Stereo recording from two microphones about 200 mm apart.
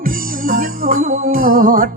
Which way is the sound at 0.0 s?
45° right (ahead or behind).